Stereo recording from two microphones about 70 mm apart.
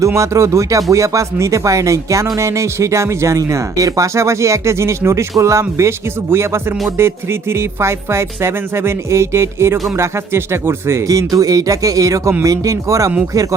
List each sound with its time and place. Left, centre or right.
0.0 s speech: right
11.1 s speech: right